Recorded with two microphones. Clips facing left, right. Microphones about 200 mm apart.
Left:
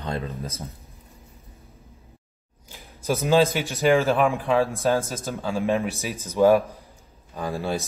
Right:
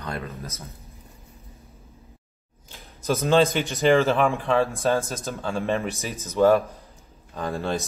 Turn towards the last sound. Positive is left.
turn(degrees=5)  # may be behind; listen again after turning